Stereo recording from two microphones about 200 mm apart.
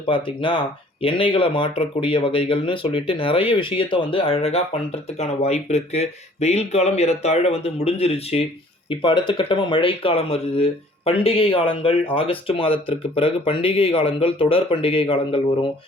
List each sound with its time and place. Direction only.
0.1 s speech: 25° left (ahead or behind)